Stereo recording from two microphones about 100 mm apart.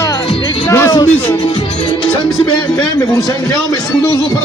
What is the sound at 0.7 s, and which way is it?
Speech, 30° left (ahead or behind).